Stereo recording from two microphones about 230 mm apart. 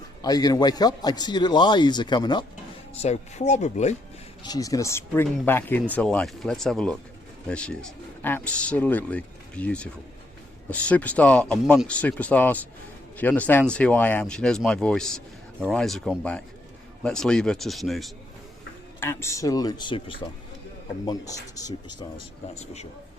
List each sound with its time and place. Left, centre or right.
0.2 s a man's voice: centre
3.0 s a man's voice: left
4.4 s a man's voice: centre
18.9 s speech: centre
22.5 s a man's voice: left